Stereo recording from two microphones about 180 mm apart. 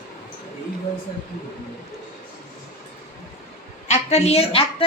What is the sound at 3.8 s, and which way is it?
Speech, 40° left (ahead or behind).